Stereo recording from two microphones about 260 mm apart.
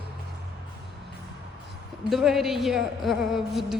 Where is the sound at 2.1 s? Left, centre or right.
Centre.